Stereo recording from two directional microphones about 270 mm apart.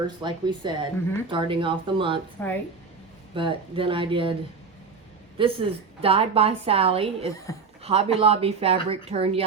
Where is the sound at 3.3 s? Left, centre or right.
Centre.